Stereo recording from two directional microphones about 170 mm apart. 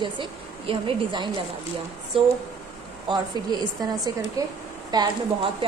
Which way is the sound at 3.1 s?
25° right (ahead or behind).